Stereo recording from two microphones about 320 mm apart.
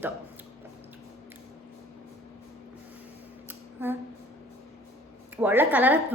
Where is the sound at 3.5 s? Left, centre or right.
Centre.